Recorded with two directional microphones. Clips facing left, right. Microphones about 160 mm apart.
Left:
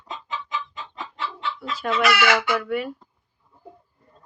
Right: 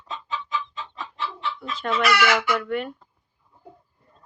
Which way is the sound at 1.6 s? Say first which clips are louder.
Left 2 dB; 5° left (ahead or behind).